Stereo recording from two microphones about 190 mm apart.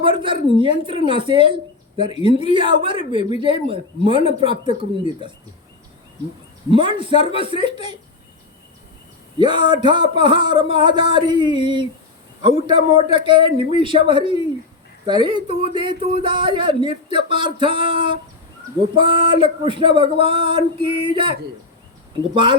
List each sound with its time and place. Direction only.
0.0 s speech: 25° right (ahead or behind)
6.7 s speech: 25° right (ahead or behind)
9.4 s speech: 25° right (ahead or behind)